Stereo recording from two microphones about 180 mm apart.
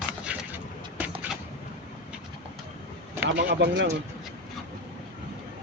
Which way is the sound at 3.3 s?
75° right (ahead or behind).